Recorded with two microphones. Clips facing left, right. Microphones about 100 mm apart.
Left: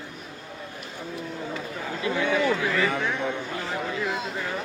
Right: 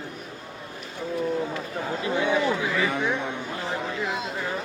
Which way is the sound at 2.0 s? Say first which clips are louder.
Even; 25° right (ahead or behind).